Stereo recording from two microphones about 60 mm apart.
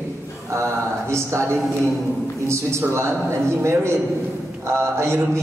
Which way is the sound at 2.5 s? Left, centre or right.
Right.